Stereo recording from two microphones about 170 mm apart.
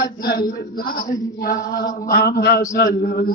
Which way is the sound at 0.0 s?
65° left (ahead or behind).